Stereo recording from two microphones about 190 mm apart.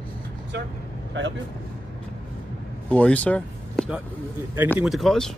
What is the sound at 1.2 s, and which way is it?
Speech, 70° right (ahead or behind).